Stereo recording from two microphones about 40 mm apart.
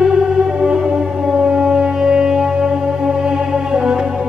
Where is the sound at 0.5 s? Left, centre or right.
Centre.